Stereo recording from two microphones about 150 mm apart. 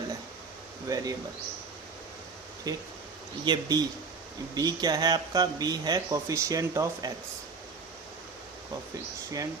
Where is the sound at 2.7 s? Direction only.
25° right (ahead or behind).